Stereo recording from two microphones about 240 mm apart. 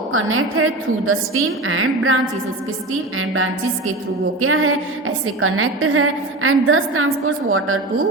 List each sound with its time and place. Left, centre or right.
0.1 s a woman's voice: right
4.4 s a woman's voice: right